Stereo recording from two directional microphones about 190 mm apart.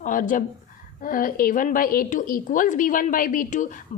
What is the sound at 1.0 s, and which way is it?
A woman's voice, 45° left (ahead or behind).